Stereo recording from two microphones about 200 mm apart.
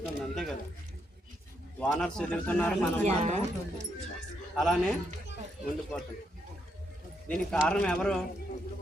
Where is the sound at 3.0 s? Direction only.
35° right (ahead or behind).